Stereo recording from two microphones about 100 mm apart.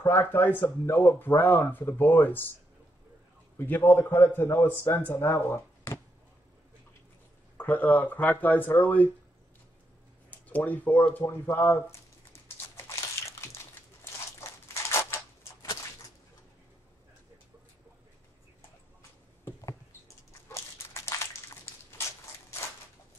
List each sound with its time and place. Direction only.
0.0 s speech: 25° left (ahead or behind)
3.5 s speech: 20° left (ahead or behind)
7.5 s speech: 15° left (ahead or behind)
10.3 s speech: 15° left (ahead or behind)
12.3 s a sound: 25° left (ahead or behind)
14.7 s typewriter: 25° left (ahead or behind)
20.4 s crushing: 25° left (ahead or behind)